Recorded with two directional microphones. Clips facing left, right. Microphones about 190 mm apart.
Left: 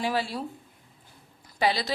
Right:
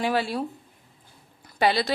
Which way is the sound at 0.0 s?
60° right (ahead or behind).